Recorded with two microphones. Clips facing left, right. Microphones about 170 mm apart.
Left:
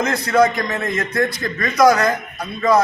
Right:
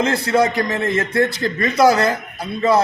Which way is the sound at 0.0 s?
30° right (ahead or behind).